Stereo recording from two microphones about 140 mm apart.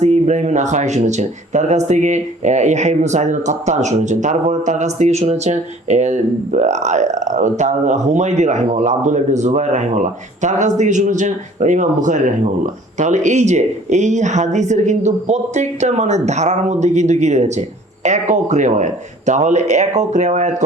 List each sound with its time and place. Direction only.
0.0 s speech: 60° right (ahead or behind)